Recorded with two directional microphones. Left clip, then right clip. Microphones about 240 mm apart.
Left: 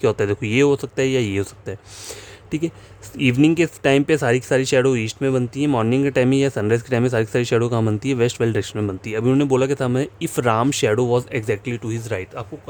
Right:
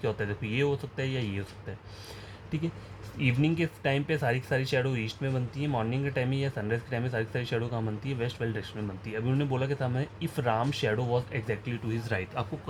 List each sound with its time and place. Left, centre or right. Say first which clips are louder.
0.0 s speech: left 13 dB; left